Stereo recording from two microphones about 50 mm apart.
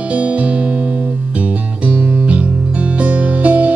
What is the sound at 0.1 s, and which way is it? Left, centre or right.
Music, right.